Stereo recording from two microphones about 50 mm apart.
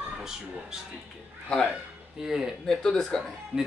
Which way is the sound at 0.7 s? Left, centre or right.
Centre.